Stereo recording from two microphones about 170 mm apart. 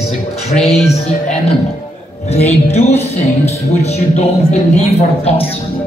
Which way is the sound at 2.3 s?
40° left (ahead or behind).